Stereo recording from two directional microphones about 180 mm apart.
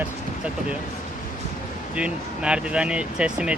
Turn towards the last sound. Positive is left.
turn(degrees=-5)  # may be behind; listen again after turning